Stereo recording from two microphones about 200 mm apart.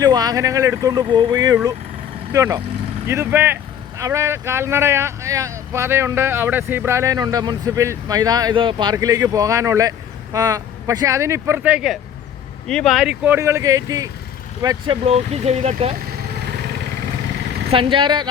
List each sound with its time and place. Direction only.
0.0 s speech: 20° right (ahead or behind)
15.0 s speech: 30° right (ahead or behind)
17.7 s speech: 25° right (ahead or behind)